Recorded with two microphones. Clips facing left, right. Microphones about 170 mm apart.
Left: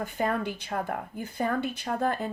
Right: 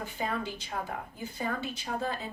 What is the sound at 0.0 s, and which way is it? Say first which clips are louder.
A woman's voice: left 5 dB; 55° left (ahead or behind).